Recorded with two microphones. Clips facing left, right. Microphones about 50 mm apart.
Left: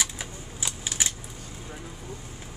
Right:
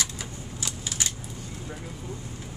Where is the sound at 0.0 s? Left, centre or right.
Centre.